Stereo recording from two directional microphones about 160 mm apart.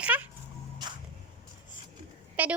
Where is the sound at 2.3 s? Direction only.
10° right (ahead or behind).